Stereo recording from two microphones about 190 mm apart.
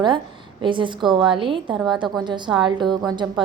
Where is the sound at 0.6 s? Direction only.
25° right (ahead or behind).